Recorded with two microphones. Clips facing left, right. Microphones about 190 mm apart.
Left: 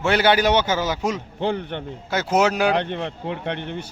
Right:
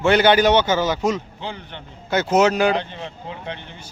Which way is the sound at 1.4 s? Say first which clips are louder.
Left 9 dB; 55° left (ahead or behind).